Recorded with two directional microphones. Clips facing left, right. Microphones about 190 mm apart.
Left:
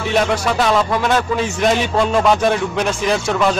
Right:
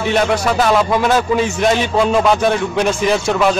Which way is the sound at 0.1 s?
Centre (ahead or behind).